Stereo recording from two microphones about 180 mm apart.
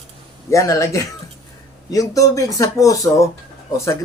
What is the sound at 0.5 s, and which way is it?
Speech, 15° left (ahead or behind).